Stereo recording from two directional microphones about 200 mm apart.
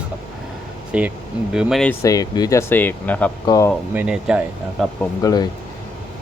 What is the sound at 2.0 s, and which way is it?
Speech, 15° left (ahead or behind).